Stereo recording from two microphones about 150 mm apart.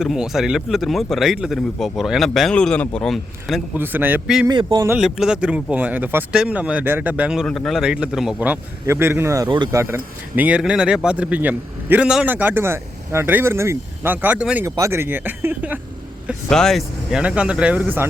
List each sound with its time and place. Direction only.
0.0 s speech: 5° right (ahead or behind)
3.8 s speech: 15° right (ahead or behind)
4.4 s speech: 25° right (ahead or behind)
4.9 s speech: 5° right (ahead or behind)
14.6 s speech: 20° right (ahead or behind)
16.5 s speech: 5° left (ahead or behind)